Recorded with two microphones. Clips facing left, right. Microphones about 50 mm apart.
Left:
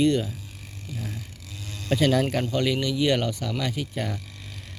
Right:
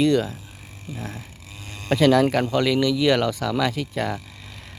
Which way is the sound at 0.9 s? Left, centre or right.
Right.